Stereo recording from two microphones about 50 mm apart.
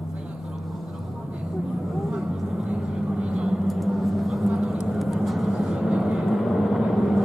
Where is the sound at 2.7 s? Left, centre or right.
Centre.